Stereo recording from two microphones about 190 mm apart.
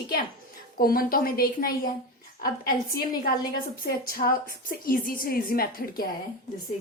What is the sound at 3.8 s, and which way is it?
A woman's voice, 50° left (ahead or behind).